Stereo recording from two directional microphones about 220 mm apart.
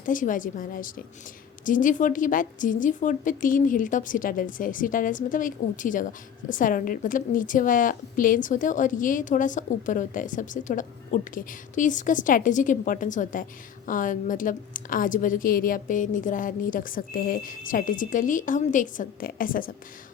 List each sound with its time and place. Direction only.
0.0 s a woman's voice: 35° left (ahead or behind)